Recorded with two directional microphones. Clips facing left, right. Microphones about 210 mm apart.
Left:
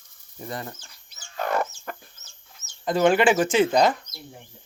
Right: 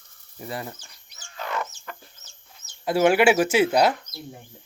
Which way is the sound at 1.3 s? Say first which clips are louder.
Left 5 dB; 50° left (ahead or behind).